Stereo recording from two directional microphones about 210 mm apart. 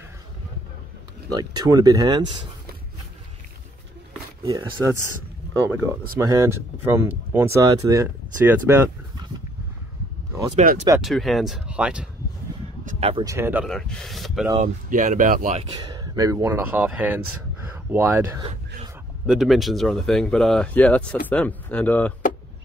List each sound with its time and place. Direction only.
1.3 s speech: 20° right (ahead or behind)
4.5 s speech: 20° right (ahead or behind)
6.1 s speech: 15° right (ahead or behind)
10.5 s speech: 35° right (ahead or behind)
11.0 s speech: centre (ahead or behind)
12.8 s a sound: 30° right (ahead or behind)
13.2 s speech: 15° right (ahead or behind)
13.7 s speech: 5° left (ahead or behind)
14.6 s speech: 40° right (ahead or behind)
15.8 s speech: 20° right (ahead or behind)
19.2 s speech: centre (ahead or behind)